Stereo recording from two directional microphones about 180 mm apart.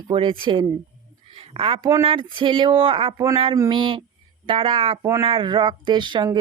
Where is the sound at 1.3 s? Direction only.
30° right (ahead or behind).